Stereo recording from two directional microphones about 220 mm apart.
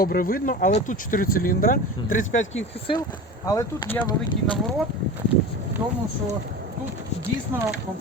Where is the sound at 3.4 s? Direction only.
15° left (ahead or behind).